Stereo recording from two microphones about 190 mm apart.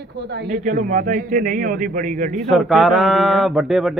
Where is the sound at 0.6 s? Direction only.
45° right (ahead or behind).